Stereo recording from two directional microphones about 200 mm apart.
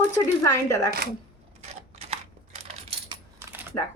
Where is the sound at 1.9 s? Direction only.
30° right (ahead or behind).